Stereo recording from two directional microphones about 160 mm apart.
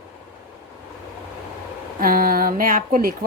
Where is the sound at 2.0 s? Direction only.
65° right (ahead or behind).